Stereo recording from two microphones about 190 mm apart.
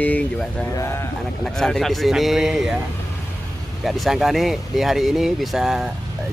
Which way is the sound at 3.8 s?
Centre (ahead or behind).